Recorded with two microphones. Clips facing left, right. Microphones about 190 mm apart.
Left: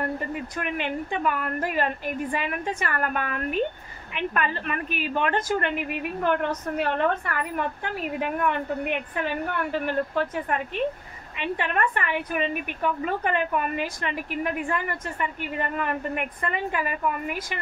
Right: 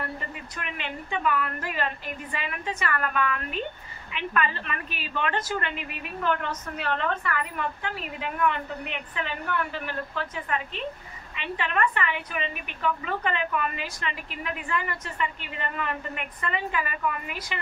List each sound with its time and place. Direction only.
0.0 s a woman's voice: 50° left (ahead or behind)